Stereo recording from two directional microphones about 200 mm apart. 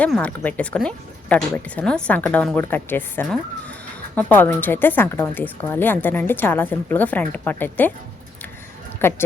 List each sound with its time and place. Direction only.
0.0 s a woman's voice: 5° left (ahead or behind)
9.0 s speech: 10° left (ahead or behind)